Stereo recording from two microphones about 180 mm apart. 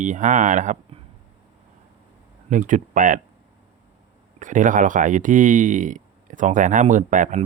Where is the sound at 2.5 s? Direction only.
45° right (ahead or behind).